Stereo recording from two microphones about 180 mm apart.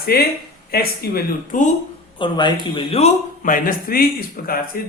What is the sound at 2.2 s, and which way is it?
A man's voice, 25° left (ahead or behind).